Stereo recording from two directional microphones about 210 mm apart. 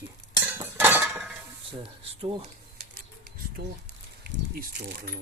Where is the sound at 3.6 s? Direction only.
50° right (ahead or behind).